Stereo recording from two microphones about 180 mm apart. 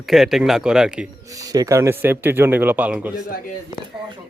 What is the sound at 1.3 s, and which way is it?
Speech, 20° right (ahead or behind).